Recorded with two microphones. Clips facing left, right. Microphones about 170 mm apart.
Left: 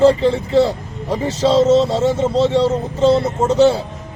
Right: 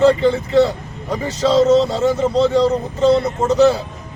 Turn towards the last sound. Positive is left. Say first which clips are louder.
# even
turn(degrees=30)  # may be behind; listen again after turning